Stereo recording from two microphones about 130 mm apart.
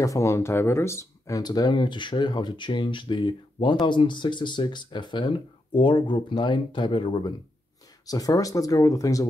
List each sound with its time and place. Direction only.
0.0 s speech: 25° left (ahead or behind)